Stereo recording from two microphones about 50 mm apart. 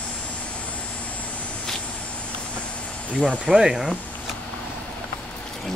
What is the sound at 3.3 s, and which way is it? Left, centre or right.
Speech, centre.